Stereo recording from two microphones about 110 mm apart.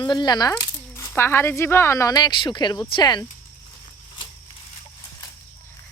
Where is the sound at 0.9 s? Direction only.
25° left (ahead or behind); by 3.2 s 40° left (ahead or behind).